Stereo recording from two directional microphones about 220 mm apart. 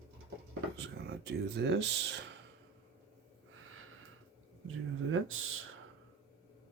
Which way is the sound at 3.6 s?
70° right (ahead or behind).